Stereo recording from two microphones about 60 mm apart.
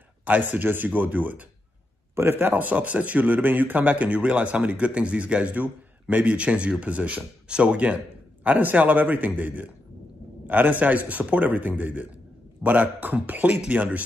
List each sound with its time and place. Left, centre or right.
0.2 s speech: right
2.1 s a man's voice: right
2.5 s speech: right